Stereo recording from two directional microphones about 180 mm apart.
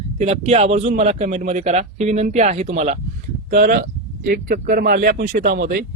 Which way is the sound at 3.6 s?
55° right (ahead or behind).